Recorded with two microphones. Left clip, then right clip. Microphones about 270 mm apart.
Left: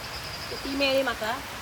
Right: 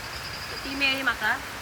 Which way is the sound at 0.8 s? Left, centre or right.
Centre.